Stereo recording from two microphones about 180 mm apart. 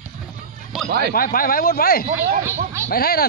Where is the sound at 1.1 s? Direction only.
55° left (ahead or behind).